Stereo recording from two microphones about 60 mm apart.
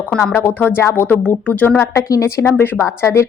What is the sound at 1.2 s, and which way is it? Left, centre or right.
Speech, left.